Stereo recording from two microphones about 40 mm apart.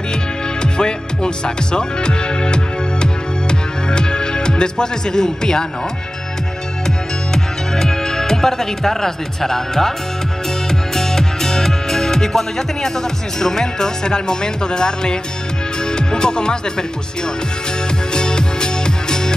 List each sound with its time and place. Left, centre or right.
0.6 s music: left
7.3 s speech: centre
10.7 s music: centre
13.4 s speech: centre
15.9 s music: centre
18.1 s music: centre